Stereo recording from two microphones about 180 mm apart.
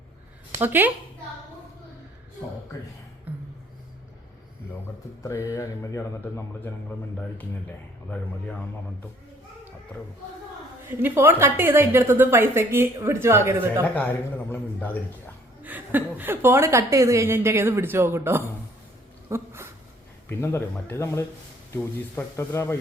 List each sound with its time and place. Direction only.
0.6 s a woman's voice: 10° right (ahead or behind)
3.3 s a sound: 10° right (ahead or behind)
5.2 s speech: 15° left (ahead or behind)
11.0 s a woman's voice: 10° right (ahead or behind)
13.9 s speech: 10° left (ahead or behind)
15.6 s a woman's voice: 10° right (ahead or behind)
20.4 s speech: 15° left (ahead or behind)